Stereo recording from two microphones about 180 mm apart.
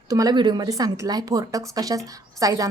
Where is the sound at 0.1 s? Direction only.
20° right (ahead or behind).